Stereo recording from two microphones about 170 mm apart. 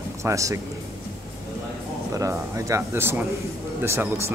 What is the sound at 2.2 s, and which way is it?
Speech, 20° right (ahead or behind).